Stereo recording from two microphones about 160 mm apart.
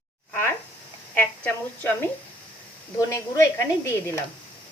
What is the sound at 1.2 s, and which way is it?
A woman's voice, 10° left (ahead or behind).